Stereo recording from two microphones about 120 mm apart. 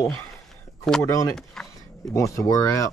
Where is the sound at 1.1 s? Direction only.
25° left (ahead or behind).